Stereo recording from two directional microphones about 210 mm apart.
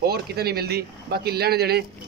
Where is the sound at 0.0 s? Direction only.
50° right (ahead or behind).